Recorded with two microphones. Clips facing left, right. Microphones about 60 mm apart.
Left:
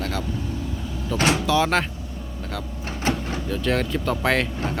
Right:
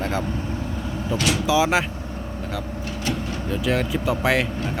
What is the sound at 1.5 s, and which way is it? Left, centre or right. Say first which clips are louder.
Speech: right 4 dB; centre.